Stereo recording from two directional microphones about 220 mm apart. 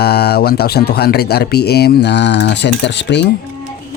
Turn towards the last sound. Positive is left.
turn(degrees=50)  # may be behind; listen again after turning